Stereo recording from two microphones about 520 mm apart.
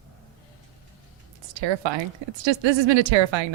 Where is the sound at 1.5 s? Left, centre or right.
Right.